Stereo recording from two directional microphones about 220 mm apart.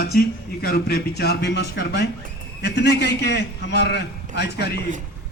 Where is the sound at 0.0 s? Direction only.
45° left (ahead or behind).